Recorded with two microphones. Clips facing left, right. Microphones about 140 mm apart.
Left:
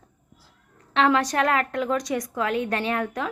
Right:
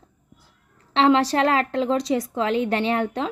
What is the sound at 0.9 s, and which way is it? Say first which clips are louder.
A woman's voice: right 3 dB; 25° right (ahead or behind).